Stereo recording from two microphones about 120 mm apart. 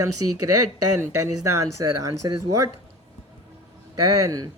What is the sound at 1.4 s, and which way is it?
Speech, 30° right (ahead or behind).